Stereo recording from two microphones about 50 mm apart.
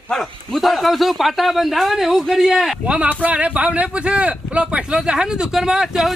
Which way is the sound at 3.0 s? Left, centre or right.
Right.